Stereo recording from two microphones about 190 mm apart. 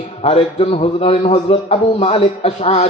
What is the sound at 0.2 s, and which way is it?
A man's voice, 30° left (ahead or behind).